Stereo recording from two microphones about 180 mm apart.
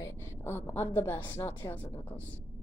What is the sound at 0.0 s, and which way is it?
A woman's voice, 15° left (ahead or behind).